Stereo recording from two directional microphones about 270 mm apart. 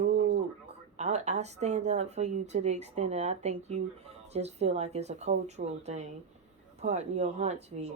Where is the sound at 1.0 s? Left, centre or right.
Right.